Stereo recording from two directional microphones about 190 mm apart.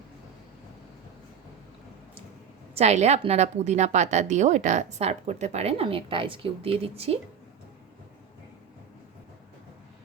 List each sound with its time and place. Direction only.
2.7 s a woman's voice: 35° right (ahead or behind)